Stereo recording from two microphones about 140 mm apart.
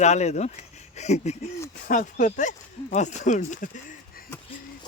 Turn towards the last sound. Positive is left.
turn(degrees=70)  # may be behind; listen again after turning